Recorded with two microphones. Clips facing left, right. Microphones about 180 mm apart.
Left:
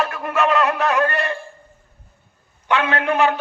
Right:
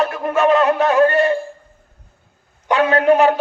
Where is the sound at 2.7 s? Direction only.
40° right (ahead or behind).